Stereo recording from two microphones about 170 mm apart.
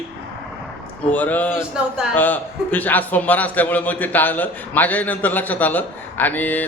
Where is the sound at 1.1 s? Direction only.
10° left (ahead or behind).